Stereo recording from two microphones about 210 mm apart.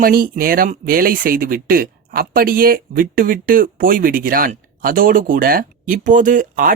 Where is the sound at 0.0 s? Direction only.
45° right (ahead or behind).